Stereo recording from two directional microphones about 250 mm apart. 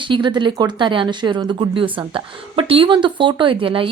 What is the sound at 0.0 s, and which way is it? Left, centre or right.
Speech, centre.